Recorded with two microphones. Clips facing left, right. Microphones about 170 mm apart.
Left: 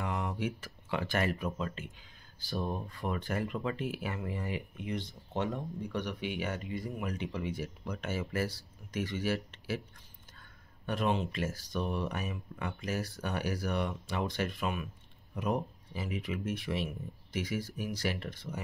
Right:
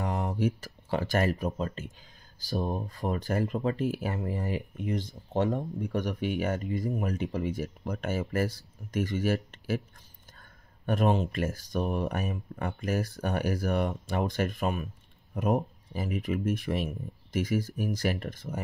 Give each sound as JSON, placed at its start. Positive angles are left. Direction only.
{"t": 0.0, "sound": "speech", "side_deg": -40}
{"t": 10.9, "sound": "speech", "side_deg": -45}